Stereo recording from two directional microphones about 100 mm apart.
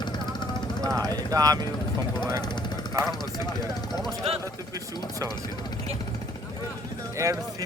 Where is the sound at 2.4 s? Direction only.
45° left (ahead or behind).